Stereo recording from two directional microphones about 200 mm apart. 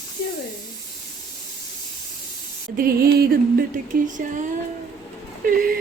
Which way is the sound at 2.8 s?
50° right (ahead or behind).